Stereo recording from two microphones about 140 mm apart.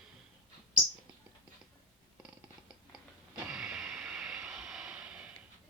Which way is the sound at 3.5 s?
5° right (ahead or behind).